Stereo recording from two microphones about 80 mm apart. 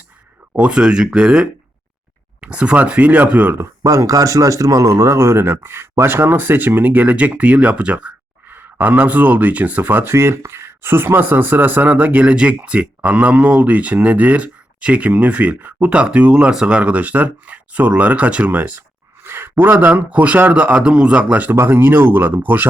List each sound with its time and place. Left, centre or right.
0.5 s speech: centre
3.6 s speech: right